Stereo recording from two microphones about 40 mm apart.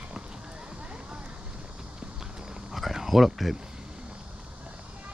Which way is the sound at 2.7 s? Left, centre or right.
Centre.